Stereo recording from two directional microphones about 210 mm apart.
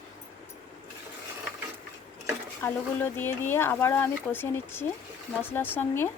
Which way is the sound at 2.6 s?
10° left (ahead or behind).